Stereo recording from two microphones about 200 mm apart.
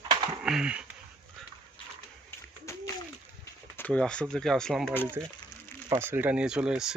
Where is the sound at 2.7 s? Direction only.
15° left (ahead or behind).